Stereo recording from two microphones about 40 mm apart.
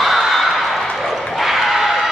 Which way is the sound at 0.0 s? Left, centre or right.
Centre.